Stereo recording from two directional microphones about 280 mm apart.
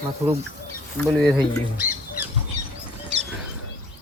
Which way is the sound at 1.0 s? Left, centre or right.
Centre.